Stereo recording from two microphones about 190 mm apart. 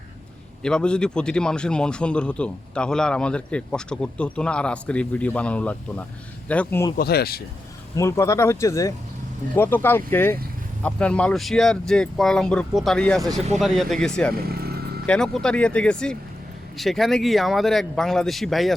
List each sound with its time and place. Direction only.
0.6 s a man's voice: 5° left (ahead or behind)
6.9 s speech: 55° left (ahead or behind)
7.9 s a man's voice: 15° left (ahead or behind)
14.4 s vehicle: 55° right (ahead or behind)
15.0 s a man's voice: 5° left (ahead or behind)